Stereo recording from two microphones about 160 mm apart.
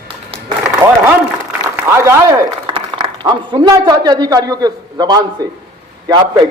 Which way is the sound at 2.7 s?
30° right (ahead or behind).